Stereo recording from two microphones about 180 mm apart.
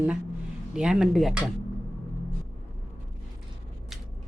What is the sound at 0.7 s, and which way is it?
Speech, 5° right (ahead or behind).